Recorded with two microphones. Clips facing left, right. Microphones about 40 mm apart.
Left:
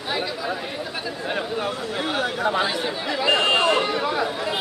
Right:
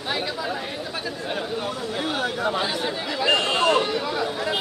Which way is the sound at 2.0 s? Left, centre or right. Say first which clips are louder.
Left 2 dB; left.